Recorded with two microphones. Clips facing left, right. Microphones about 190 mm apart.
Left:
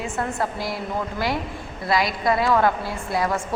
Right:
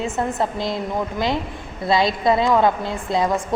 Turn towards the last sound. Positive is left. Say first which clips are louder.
# right 4 dB
turn(degrees=-20)  # may be behind; listen again after turning